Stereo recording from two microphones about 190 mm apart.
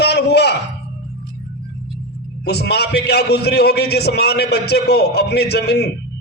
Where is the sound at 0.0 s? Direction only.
60° left (ahead or behind).